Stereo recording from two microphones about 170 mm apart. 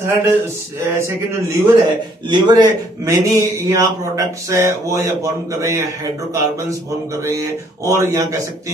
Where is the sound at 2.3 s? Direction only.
25° right (ahead or behind).